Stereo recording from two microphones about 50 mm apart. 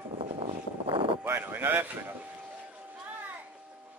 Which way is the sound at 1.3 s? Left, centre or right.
Right.